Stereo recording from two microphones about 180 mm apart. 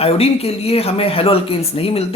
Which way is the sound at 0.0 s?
35° left (ahead or behind).